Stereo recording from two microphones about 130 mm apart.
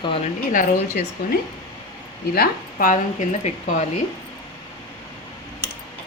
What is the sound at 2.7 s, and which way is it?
Speech, 85° left.